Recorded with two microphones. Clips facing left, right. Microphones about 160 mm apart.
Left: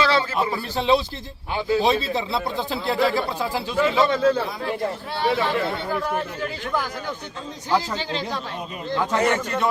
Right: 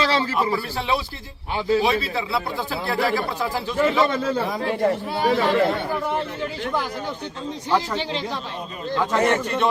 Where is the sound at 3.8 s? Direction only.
50° right (ahead or behind).